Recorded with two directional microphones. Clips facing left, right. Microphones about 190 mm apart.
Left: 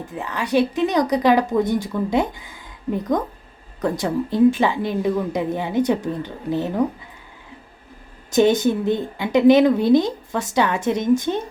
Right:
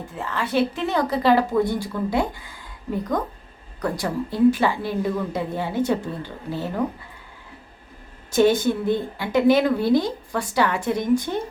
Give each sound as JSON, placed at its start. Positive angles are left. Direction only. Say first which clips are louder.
{"t": 0.1, "sound": "a woman's voice", "louder": "left 3 dB", "side_deg": 15}
{"t": 3.8, "sound": "a woman's voice", "louder": "left 3 dB", "side_deg": 20}
{"t": 8.4, "sound": "a woman's voice", "louder": "left 2 dB", "side_deg": 20}